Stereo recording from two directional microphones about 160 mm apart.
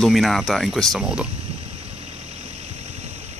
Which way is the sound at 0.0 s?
Centre (ahead or behind).